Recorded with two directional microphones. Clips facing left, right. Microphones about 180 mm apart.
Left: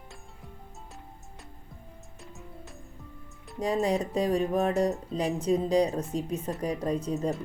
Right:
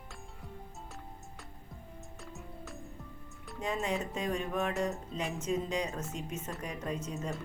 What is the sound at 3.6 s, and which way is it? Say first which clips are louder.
A woman's voice: left 7 dB; 35° left (ahead or behind).